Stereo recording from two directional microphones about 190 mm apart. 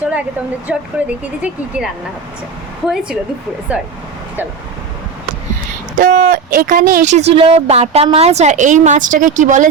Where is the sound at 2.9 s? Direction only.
5° right (ahead or behind).